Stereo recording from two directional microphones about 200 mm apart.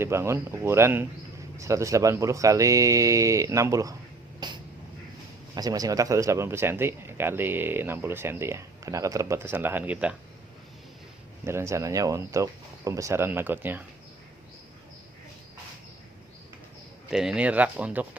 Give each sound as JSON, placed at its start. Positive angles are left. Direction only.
{"t": 0.0, "sound": "speech", "side_deg": -15}
{"t": 4.4, "sound": "a sound", "side_deg": -20}
{"t": 5.5, "sound": "speech", "side_deg": -20}
{"t": 11.4, "sound": "speech", "side_deg": -15}
{"t": 17.1, "sound": "speech", "side_deg": 0}